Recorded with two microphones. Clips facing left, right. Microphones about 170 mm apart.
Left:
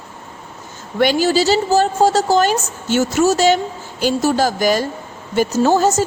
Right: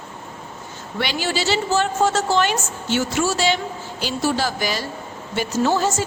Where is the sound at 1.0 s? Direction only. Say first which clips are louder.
Left 9 dB; 45° left (ahead or behind).